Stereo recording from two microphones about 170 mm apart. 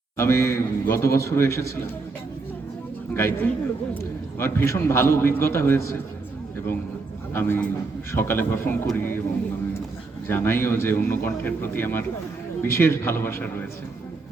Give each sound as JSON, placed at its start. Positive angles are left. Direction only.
{"t": 0.2, "sound": "a man's voice", "side_deg": 15}
{"t": 3.2, "sound": "a man's voice", "side_deg": 15}
{"t": 7.3, "sound": "a man's voice", "side_deg": 15}
{"t": 10.2, "sound": "a man's voice", "side_deg": 15}